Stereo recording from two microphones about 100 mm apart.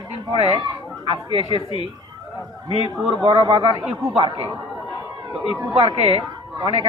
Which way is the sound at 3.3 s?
60° right (ahead or behind).